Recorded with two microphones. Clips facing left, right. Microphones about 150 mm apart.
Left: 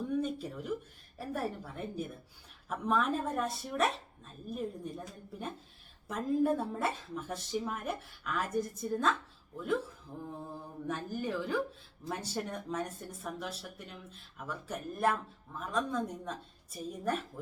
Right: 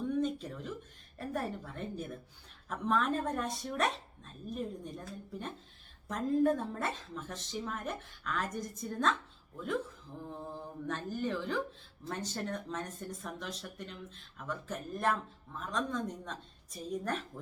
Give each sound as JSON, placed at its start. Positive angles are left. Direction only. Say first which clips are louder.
{"t": 0.2, "sound": "a sound", "louder": "right 1 dB", "side_deg": 10}
{"t": 1.2, "sound": "a woman's voice", "louder": "even", "side_deg": 5}
{"t": 10.8, "sound": "speech", "louder": "even", "side_deg": 10}